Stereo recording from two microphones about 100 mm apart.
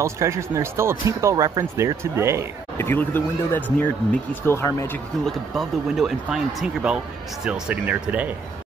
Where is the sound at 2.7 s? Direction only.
20° left (ahead or behind).